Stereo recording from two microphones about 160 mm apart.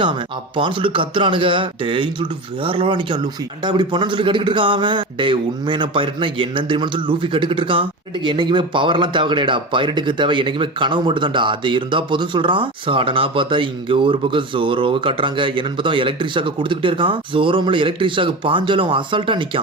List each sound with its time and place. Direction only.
0.0 s speech: 30° right (ahead or behind)